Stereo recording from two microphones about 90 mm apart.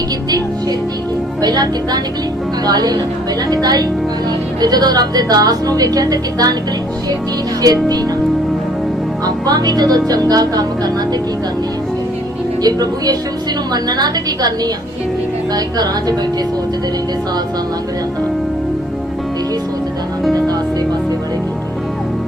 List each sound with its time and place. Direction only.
1.4 s speech: 50° right (ahead or behind)
7.6 s speech: 45° right (ahead or behind)
9.2 s speech: 50° right (ahead or behind)
12.6 s speech: 45° right (ahead or behind)